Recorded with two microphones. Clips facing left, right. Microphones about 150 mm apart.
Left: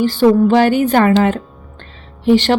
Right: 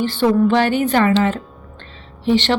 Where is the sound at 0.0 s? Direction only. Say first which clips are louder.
Left 4 dB; 40° left (ahead or behind).